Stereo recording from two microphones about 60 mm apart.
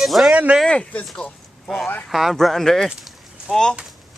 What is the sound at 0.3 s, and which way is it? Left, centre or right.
Speech, centre.